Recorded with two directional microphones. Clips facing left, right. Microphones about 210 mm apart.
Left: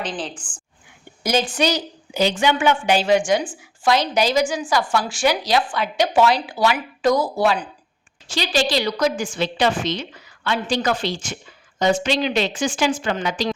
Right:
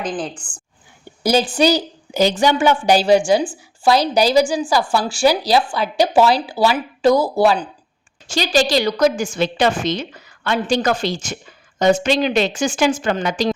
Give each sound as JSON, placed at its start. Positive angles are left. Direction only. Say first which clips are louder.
{"t": 0.4, "sound": "speech", "louder": "right 2 dB", "side_deg": -10}
{"t": 1.2, "sound": "a woman's voice", "louder": "right 5 dB", "side_deg": -35}
{"t": 8.3, "sound": "a woman's voice", "louder": "right 4 dB", "side_deg": -45}